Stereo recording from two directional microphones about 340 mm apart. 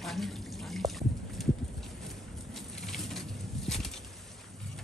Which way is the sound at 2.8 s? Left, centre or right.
Centre.